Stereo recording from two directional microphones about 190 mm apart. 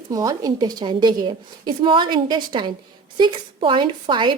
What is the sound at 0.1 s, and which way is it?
A woman's voice, 20° right (ahead or behind).